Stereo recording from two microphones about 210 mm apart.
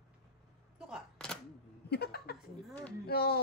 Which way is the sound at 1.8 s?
50° left (ahead or behind).